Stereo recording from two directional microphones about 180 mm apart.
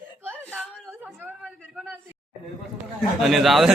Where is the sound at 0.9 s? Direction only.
10° right (ahead or behind).